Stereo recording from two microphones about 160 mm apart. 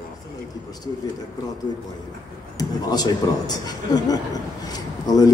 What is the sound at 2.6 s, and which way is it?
A man's voice, 25° left (ahead or behind).